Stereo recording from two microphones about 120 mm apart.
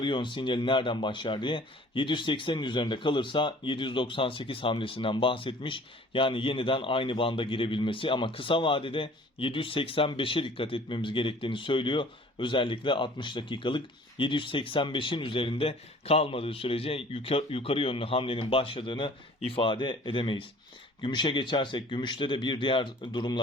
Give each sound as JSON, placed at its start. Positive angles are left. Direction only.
{"t": 0.0, "sound": "speech", "side_deg": 40}